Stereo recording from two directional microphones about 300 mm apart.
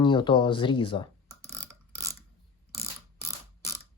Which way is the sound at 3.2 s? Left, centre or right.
Centre.